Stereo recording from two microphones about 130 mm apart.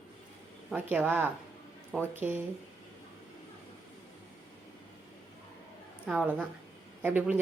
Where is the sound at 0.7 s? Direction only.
15° right (ahead or behind).